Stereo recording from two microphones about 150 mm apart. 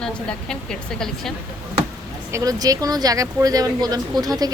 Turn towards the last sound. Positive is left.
turn(degrees=-25)  # may be behind; listen again after turning